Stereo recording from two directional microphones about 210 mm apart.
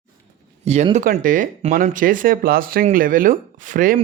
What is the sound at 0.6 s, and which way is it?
Speech, 30° right (ahead or behind).